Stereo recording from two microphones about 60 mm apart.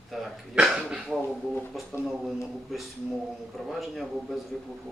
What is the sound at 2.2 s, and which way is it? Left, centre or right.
Speech, centre.